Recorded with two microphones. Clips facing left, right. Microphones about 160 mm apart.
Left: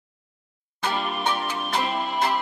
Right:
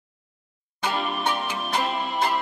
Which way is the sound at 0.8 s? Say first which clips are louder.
Even; centre (ahead or behind).